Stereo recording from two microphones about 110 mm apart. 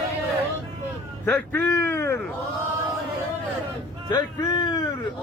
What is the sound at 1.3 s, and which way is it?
Speech, 15° left (ahead or behind).